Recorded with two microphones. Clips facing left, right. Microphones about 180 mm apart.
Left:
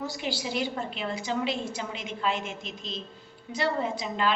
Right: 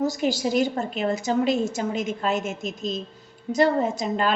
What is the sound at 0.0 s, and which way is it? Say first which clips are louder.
A woman's voice: right 9 dB; 45° right (ahead or behind).